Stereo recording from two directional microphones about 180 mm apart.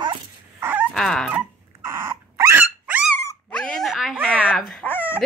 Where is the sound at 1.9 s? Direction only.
15° right (ahead or behind).